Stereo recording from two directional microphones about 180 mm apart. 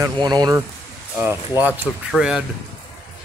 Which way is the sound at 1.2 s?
10° right (ahead or behind).